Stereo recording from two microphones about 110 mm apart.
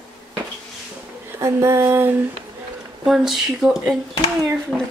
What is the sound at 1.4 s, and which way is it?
Female singing, 25° right (ahead or behind).